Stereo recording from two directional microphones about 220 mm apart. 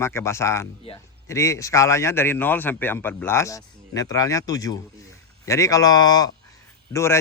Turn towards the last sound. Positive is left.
turn(degrees=10)  # may be behind; listen again after turning